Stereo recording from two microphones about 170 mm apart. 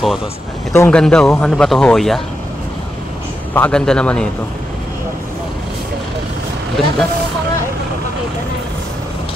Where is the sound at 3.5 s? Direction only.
10° left (ahead or behind).